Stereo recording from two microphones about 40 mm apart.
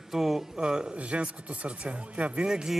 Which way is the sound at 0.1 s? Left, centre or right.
Centre.